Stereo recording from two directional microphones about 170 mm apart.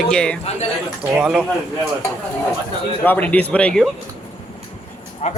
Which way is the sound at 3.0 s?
10° left (ahead or behind).